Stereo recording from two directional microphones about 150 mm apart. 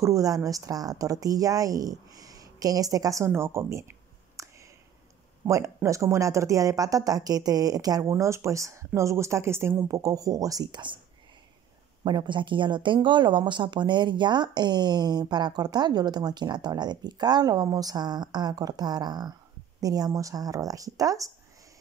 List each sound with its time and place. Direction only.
0.0 s speech: 20° right (ahead or behind)
4.4 s a sound: 20° right (ahead or behind)
5.4 s speech: 20° right (ahead or behind)
12.0 s speech: 30° right (ahead or behind)